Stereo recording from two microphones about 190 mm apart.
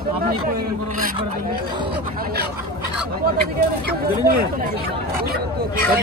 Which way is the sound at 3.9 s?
50° right (ahead or behind).